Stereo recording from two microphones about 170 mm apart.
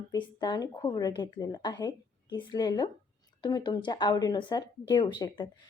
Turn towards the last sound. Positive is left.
turn(degrees=25)  # may be behind; listen again after turning